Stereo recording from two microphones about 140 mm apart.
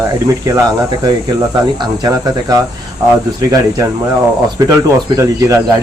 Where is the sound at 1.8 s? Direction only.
30° right (ahead or behind).